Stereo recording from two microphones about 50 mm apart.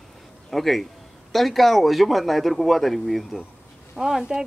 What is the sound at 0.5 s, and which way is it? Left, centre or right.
A woman's voice, centre.